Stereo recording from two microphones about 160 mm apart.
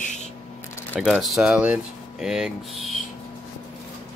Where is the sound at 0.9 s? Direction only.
Centre (ahead or behind).